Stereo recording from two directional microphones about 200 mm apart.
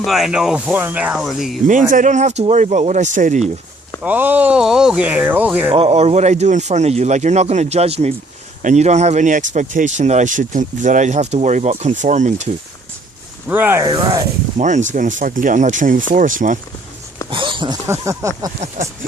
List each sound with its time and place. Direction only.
0.0 s speech: centre (ahead or behind)
1.9 s speech: 40° right (ahead or behind)
4.0 s speech: 10° right (ahead or behind)
5.7 s speech: 30° right (ahead or behind)
13.5 s speech: 10° right (ahead or behind)
14.6 s speech: 35° right (ahead or behind)
17.3 s speech: 25° right (ahead or behind)
17.8 s speech: 15° right (ahead or behind)